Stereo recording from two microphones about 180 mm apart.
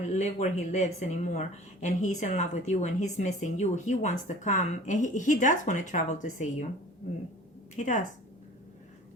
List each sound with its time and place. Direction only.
0.1 s speech: 40° left (ahead or behind)
7.8 s speech: 40° left (ahead or behind)